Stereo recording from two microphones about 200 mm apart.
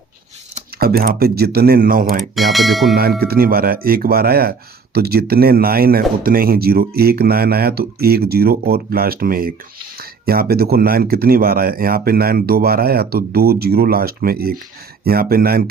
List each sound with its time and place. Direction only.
0.8 s speech: 50° right (ahead or behind)
2.3 s speech: centre (ahead or behind)
2.9 s speech: 50° right (ahead or behind)